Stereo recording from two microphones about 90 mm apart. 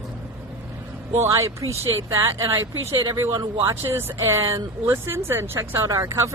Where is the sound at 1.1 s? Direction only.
30° right (ahead or behind).